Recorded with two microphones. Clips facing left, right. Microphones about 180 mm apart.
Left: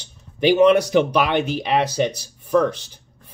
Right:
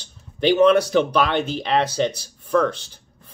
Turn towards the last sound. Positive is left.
turn(degrees=15)  # may be behind; listen again after turning